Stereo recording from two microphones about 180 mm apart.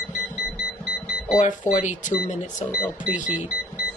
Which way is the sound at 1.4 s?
45° left (ahead or behind).